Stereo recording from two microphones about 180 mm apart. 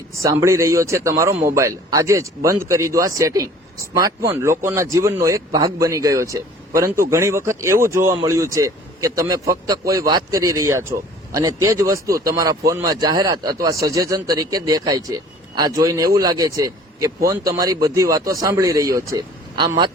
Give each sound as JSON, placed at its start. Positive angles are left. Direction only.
{"t": 0.2, "sound": "a man's voice", "side_deg": -15}